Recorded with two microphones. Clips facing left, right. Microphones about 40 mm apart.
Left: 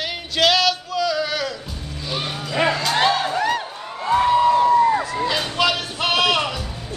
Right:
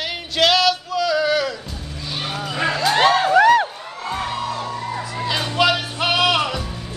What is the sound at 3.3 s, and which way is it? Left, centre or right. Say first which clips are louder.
Music: right 9 dB; right.